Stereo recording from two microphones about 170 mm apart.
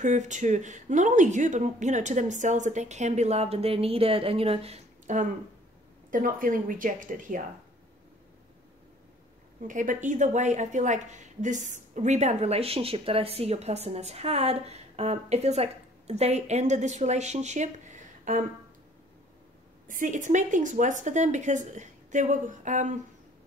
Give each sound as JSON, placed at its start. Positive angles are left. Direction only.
{"t": 0.0, "sound": "speech", "side_deg": -45}
{"t": 9.7, "sound": "a woman's voice", "side_deg": -50}
{"t": 19.9, "sound": "speech", "side_deg": -50}